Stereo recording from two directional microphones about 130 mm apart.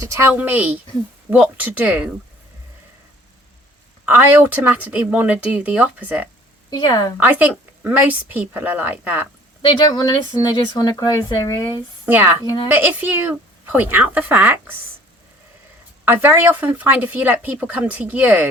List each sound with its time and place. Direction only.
0.0 s speech: 20° right (ahead or behind)
4.0 s speech: 15° right (ahead or behind)
6.7 s speech: 30° left (ahead or behind)
7.2 s speech: 10° right (ahead or behind)
9.6 s speech: 35° left (ahead or behind)
12.0 s speech: 15° right (ahead or behind)
16.0 s speech: 15° right (ahead or behind)